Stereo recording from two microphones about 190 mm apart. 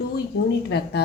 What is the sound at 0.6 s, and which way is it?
Speech, 60° left (ahead or behind).